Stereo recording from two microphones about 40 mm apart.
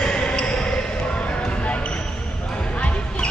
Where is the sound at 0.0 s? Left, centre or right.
Left.